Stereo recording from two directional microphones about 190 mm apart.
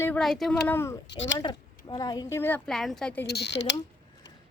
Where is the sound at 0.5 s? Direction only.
15° left (ahead or behind).